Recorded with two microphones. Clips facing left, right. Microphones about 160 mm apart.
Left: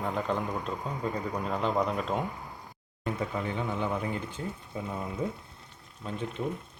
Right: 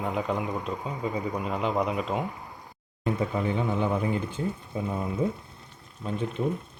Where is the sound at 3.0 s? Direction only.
20° right (ahead or behind).